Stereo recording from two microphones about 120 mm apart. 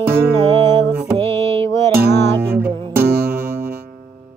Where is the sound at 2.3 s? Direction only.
20° right (ahead or behind).